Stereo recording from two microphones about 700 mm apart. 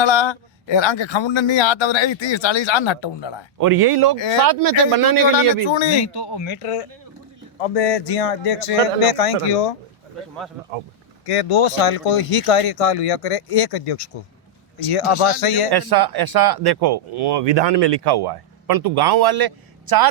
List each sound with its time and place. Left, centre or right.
0.0 s a man's voice: left
3.6 s speech: right
5.6 s a man's voice: left
11.3 s speech: left
15.7 s speech: right